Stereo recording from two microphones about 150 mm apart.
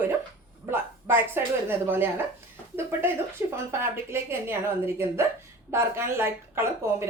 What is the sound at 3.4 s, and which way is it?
Speech, 15° right (ahead or behind).